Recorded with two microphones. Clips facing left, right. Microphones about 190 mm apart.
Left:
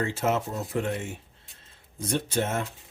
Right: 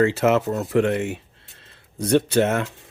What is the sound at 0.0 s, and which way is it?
Speech, 75° right (ahead or behind).